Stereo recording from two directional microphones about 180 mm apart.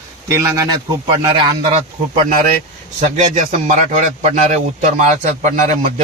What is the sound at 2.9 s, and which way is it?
A man's voice, 45° right (ahead or behind).